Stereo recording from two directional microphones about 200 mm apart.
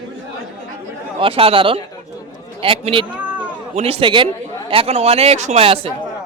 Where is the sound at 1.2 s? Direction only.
30° right (ahead or behind).